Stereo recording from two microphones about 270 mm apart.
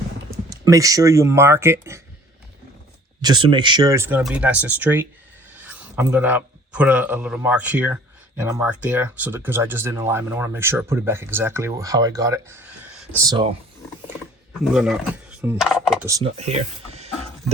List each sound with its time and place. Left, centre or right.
0.5 s speech: centre
3.2 s a man's voice: centre
13.2 s speech: centre
14.6 s speech: centre
16.0 s speech: centre